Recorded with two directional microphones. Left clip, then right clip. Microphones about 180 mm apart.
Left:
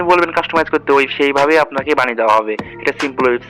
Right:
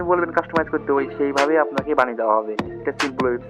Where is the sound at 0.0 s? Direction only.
30° left (ahead or behind).